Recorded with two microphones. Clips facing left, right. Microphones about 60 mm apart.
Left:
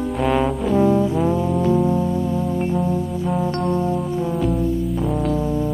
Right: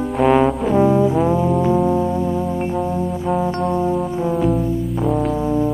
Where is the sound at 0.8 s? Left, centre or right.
Centre.